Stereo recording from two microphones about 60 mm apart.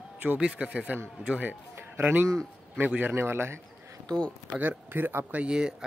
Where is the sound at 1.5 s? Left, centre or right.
Right.